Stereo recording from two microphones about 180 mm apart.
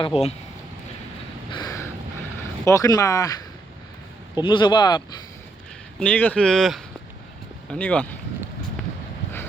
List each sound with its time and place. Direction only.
0.0 s speech: 35° left (ahead or behind)
1.5 s a sound: 20° left (ahead or behind)
2.6 s speech: 20° left (ahead or behind)
6.0 s speech: 10° left (ahead or behind)